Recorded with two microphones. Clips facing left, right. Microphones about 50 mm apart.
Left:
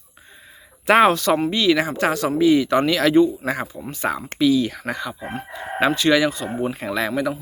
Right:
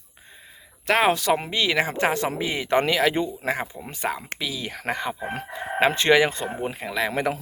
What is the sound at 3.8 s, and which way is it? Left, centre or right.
Speech, centre.